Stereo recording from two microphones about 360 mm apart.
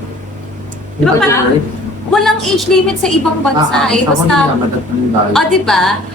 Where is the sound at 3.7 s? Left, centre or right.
Centre.